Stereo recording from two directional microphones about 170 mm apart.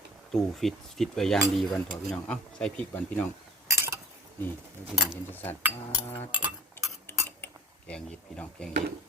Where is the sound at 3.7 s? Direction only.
15° right (ahead or behind).